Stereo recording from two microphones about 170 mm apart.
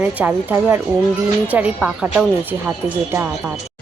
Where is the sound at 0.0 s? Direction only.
10° right (ahead or behind).